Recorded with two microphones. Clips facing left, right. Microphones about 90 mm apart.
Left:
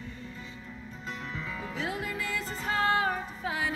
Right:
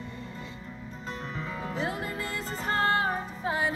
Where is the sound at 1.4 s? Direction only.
35° right (ahead or behind).